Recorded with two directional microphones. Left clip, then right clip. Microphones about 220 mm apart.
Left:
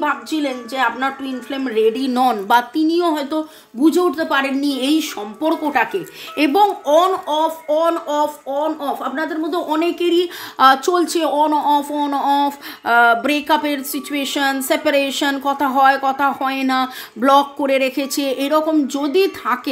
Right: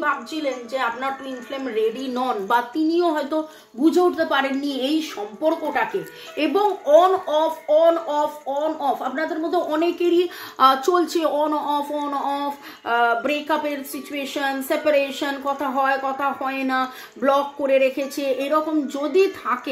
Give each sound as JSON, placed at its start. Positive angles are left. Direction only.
{"t": 0.0, "sound": "a woman's voice", "side_deg": 50}